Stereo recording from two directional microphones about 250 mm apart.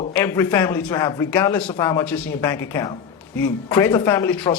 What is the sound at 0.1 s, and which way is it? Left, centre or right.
A man's voice, centre.